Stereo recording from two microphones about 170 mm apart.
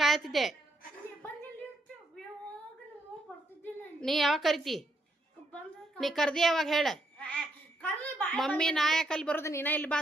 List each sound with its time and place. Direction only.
0.0 s a woman's voice: centre (ahead or behind)
4.0 s a woman's voice: centre (ahead or behind)